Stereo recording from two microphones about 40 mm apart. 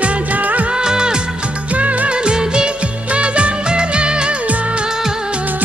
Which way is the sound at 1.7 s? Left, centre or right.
Right.